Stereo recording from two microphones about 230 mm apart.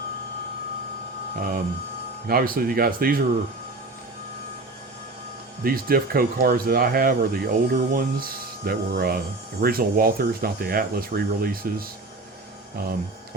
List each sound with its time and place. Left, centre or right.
1.4 s speech: right
5.6 s speech: right